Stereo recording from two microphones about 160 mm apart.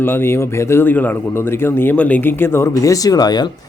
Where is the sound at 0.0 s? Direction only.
15° left (ahead or behind).